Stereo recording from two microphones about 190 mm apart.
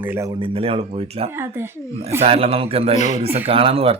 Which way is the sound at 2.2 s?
30° right (ahead or behind).